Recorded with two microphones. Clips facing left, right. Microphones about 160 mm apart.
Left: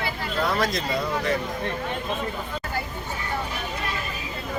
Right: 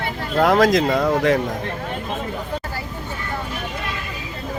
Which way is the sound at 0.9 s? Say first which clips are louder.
Right 8 dB; 50° right (ahead or behind).